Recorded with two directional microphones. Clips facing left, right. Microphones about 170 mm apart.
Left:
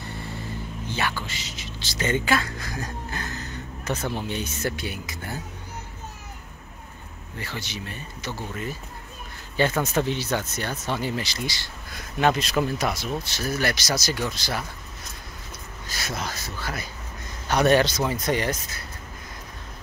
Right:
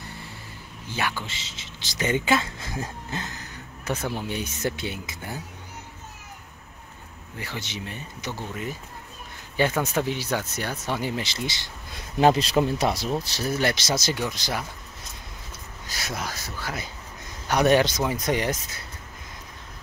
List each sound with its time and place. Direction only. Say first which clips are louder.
0.8 s speech: even; 10° right (ahead or behind)
7.3 s speech: even; 15° right (ahead or behind)
9.6 s speech: left 1 dB; 10° right (ahead or behind)
15.9 s speech: left 1 dB; 10° right (ahead or behind)